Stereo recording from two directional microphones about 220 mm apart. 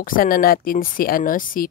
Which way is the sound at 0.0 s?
40° left (ahead or behind).